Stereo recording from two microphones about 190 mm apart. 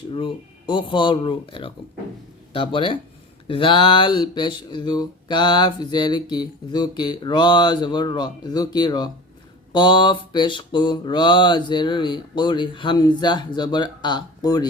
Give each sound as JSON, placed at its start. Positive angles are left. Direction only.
{"t": 0.1, "sound": "speech", "side_deg": 25}